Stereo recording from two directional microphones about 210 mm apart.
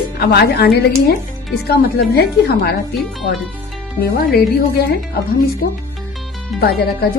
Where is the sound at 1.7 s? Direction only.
50° left (ahead or behind).